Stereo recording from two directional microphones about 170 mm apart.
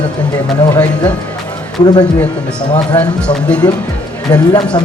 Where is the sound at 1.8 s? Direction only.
25° left (ahead or behind).